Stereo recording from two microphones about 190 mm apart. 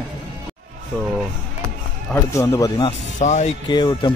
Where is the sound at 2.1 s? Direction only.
15° left (ahead or behind).